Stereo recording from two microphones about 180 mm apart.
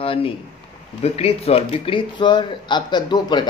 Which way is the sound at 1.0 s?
35° left (ahead or behind).